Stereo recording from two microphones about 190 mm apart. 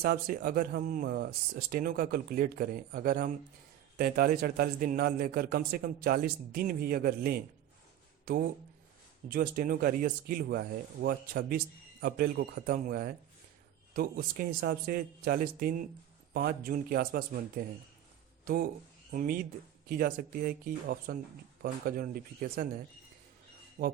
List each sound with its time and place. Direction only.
0.0 s speech: 50° right (ahead or behind)
23.8 s speech: 40° right (ahead or behind)